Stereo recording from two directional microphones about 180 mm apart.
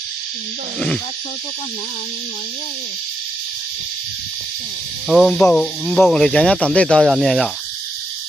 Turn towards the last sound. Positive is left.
turn(degrees=0)  # may be behind; listen again after turning